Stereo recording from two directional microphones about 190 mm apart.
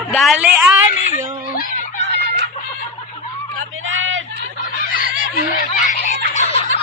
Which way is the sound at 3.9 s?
90° right.